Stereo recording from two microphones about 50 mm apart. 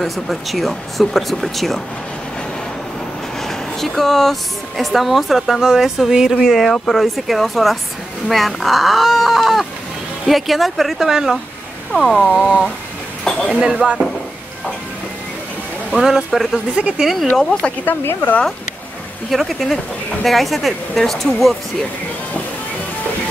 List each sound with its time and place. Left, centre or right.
0.0 s speech: centre
3.4 s speech: centre
11.9 s speech: centre
13.5 s speech: centre
16.0 s speech: centre
17.0 s speech: centre
17.4 s speech: centre
17.8 s speech: left
19.3 s speech: centre